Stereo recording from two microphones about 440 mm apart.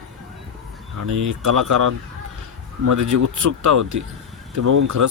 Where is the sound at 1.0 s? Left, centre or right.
Right.